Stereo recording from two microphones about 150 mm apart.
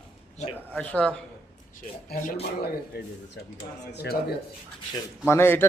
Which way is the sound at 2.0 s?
80° left.